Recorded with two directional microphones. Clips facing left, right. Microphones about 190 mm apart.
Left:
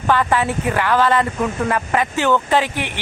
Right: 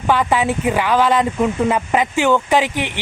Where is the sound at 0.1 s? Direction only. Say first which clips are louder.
Right 1 dB; 15° right (ahead or behind).